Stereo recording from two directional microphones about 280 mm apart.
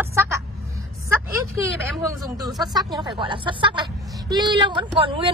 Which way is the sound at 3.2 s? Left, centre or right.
Centre.